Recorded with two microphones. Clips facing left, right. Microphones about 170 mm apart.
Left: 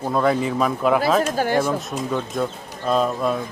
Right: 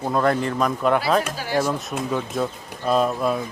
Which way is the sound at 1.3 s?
50° left (ahead or behind).